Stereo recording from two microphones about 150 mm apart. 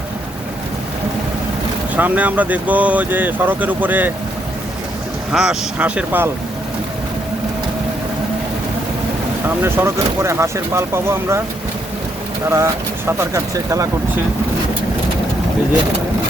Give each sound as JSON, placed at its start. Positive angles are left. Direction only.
{"t": 2.0, "sound": "speech", "side_deg": -10}
{"t": 5.3, "sound": "speech", "side_deg": -5}
{"t": 9.6, "sound": "speech", "side_deg": -15}
{"t": 12.5, "sound": "speech", "side_deg": -20}